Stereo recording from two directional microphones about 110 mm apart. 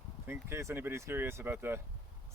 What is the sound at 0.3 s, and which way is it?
Speech, 25° right (ahead or behind).